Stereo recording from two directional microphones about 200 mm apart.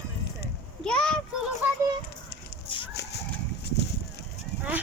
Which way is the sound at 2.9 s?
55° left (ahead or behind).